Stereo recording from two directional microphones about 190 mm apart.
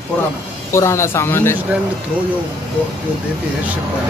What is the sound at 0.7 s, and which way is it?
Speech, 15° left (ahead or behind).